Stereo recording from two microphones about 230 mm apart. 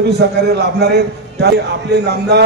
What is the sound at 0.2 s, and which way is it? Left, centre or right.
A man's voice, right.